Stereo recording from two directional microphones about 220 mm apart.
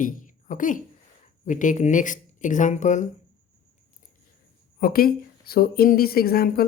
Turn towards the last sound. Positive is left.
turn(degrees=45)  # may be behind; listen again after turning